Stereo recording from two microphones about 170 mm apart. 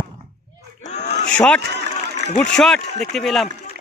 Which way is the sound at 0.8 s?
45° left (ahead or behind).